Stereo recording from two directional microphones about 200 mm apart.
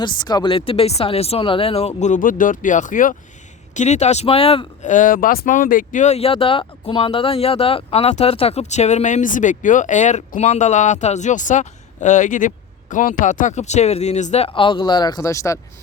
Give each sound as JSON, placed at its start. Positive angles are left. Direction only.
{"t": 0.0, "sound": "speech", "side_deg": 20}